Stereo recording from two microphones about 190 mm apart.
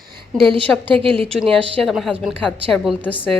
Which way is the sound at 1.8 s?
Centre (ahead or behind).